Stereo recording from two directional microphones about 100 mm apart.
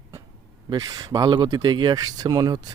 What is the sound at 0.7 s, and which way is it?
Speech, 40° right (ahead or behind).